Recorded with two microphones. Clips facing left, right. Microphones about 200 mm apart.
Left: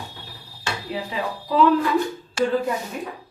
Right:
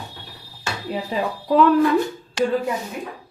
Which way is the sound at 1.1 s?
50° right (ahead or behind).